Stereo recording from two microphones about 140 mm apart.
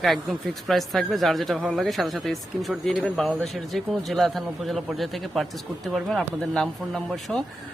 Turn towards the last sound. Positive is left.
turn(degrees=5)  # may be behind; listen again after turning